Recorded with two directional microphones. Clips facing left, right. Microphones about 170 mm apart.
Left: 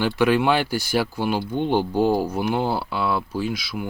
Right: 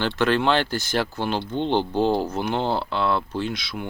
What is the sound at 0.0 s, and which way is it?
Speech, 10° left (ahead or behind).